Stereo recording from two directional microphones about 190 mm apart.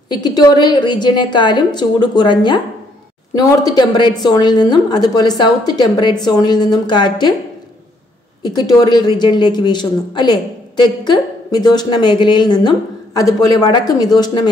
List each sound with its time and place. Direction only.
0.1 s a woman's voice: 20° left (ahead or behind)
8.4 s a woman's voice: 20° left (ahead or behind)